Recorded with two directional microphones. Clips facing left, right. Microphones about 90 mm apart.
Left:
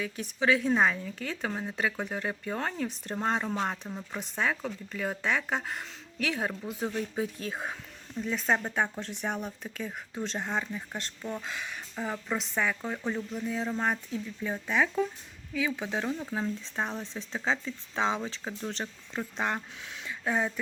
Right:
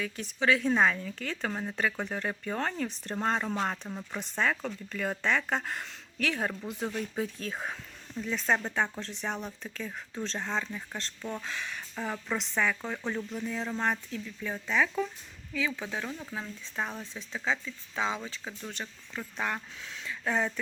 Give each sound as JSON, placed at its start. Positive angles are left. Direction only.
{"t": 0.2, "sound": "speech", "side_deg": 15}
{"t": 14.1, "sound": "speech", "side_deg": 20}